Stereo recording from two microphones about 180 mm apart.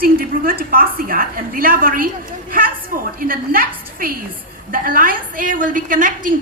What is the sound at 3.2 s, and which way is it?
A woman's voice, 55° right (ahead or behind).